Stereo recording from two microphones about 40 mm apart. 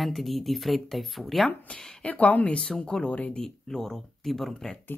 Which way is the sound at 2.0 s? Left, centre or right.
Left.